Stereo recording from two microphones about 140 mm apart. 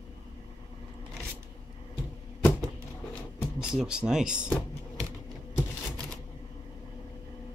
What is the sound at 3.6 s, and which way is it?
Speech, 5° right (ahead or behind).